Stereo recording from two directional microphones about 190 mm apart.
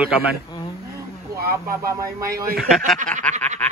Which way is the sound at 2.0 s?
15° right (ahead or behind).